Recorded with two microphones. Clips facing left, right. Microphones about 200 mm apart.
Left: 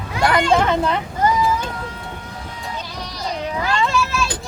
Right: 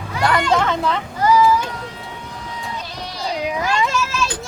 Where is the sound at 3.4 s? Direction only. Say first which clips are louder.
Right 1 dB; 15° right (ahead or behind).